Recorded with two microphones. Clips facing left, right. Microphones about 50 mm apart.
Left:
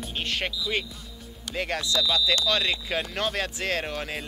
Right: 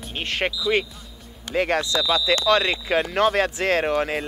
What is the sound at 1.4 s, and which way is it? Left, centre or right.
Speech, right.